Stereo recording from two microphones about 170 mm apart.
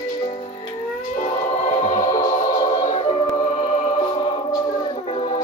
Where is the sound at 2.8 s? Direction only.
35° left (ahead or behind).